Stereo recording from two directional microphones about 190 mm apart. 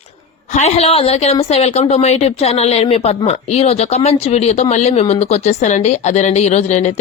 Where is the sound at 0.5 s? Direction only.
35° left (ahead or behind).